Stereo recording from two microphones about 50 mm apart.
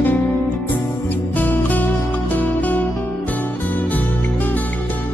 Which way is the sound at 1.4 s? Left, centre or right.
Left.